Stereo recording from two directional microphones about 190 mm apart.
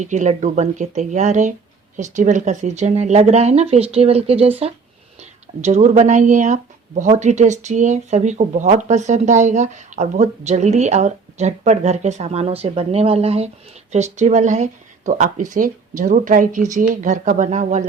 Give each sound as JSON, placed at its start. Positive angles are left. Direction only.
{"t": 0.0, "sound": "speech", "side_deg": -40}